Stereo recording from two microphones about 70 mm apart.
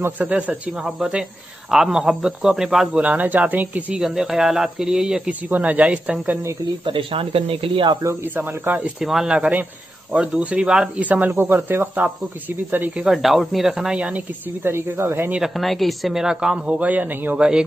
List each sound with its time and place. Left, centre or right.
0.2 s speech: centre
2.9 s speech: right
4.0 s speech: centre
5.5 s speech: right
8.0 s speech: right
8.4 s speech: right
9.0 s speech: centre
11.1 s speech: right
13.0 s speech: centre
14.6 s speech: right
15.4 s speech: centre; by 17.4 s right
17.4 s speech: centre